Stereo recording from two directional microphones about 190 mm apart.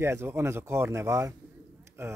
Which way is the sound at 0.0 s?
15° right (ahead or behind).